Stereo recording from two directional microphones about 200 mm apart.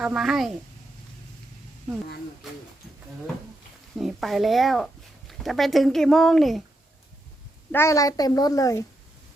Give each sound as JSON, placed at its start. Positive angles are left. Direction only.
{"t": 0.0, "sound": "speech", "side_deg": 0}
{"t": 3.9, "sound": "speech", "side_deg": 0}
{"t": 7.7, "sound": "a woman's voice", "side_deg": 15}